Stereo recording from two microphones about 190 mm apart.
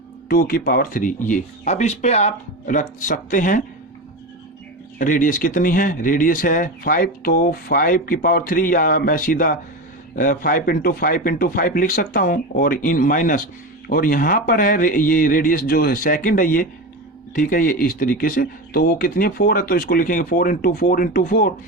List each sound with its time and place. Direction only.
0.3 s speech: 50° left (ahead or behind)
4.9 s speech: 45° left (ahead or behind)